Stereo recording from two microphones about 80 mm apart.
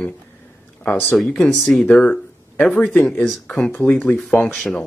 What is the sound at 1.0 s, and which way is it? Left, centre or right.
Speech, centre.